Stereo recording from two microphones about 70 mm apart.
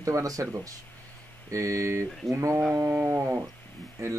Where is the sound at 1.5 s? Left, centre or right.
Right.